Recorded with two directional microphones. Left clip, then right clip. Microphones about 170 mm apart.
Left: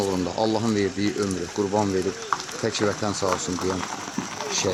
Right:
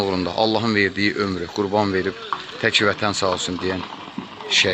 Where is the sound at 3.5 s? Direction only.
45° right (ahead or behind).